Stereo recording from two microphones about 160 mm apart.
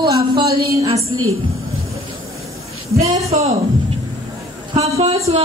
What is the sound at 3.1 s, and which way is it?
Speech, 40° right (ahead or behind).